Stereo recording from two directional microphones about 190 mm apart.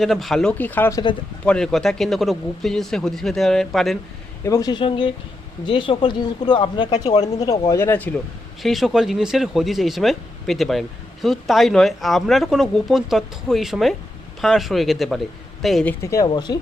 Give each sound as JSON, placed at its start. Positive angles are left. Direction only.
{"t": 0.0, "sound": "speech", "side_deg": 0}
{"t": 1.5, "sound": "speech", "side_deg": 5}
{"t": 4.4, "sound": "speech", "side_deg": 20}
{"t": 7.1, "sound": "speech", "side_deg": 35}
{"t": 7.3, "sound": "speech", "side_deg": 20}
{"t": 8.6, "sound": "speech", "side_deg": 0}